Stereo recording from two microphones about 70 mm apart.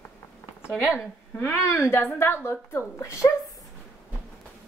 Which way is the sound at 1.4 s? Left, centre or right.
Left.